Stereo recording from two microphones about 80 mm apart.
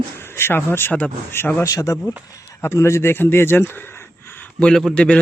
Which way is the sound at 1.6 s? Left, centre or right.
Left.